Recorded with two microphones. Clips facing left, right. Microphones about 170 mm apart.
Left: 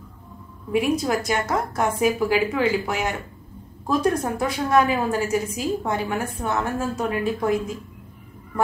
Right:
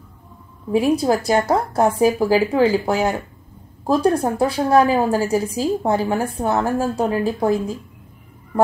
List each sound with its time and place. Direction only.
0.7 s a woman's voice: 30° right (ahead or behind)